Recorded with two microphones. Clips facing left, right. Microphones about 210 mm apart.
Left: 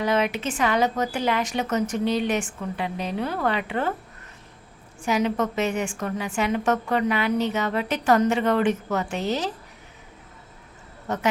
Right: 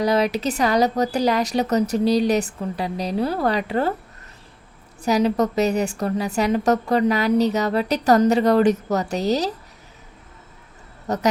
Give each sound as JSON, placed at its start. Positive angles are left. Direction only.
{"t": 0.0, "sound": "a woman's voice", "side_deg": -35}
{"t": 5.0, "sound": "a woman's voice", "side_deg": -40}
{"t": 11.1, "sound": "a woman's voice", "side_deg": -35}